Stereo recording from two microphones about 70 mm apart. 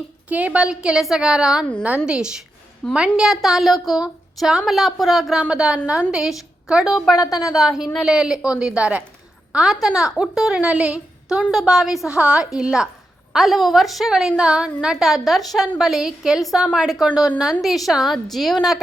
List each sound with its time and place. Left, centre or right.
0.3 s a woman's voice: centre
2.8 s a woman's voice: centre
3.2 s a woman's voice: centre
5.3 s a woman's voice: centre
7.2 s a woman's voice: left
7.5 s a woman's voice: centre
10.6 s a woman's voice: centre